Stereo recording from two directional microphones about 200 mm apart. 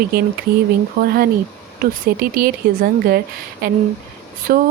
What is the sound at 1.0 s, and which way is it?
Speech, 50° right (ahead or behind).